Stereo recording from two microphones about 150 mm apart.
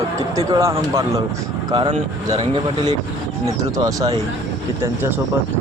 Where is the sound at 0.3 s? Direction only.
20° right (ahead or behind).